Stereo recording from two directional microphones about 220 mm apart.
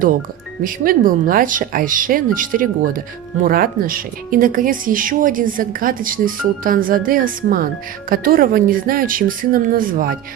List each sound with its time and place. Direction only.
0.6 s speech: 40° right (ahead or behind)